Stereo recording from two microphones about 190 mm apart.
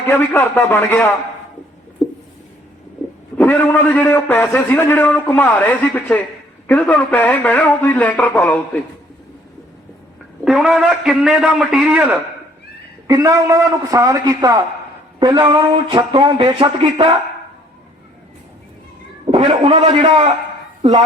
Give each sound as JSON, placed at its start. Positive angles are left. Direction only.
{"t": 0.0, "sound": "a man's voice", "side_deg": 10}
{"t": 2.0, "sound": "a sound", "side_deg": 0}
{"t": 3.3, "sound": "a man's voice", "side_deg": 10}
{"t": 10.4, "sound": "a man's voice", "side_deg": 0}
{"t": 19.2, "sound": "a man's voice", "side_deg": -30}